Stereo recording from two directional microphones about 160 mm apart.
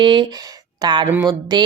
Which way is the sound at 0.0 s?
30° right (ahead or behind).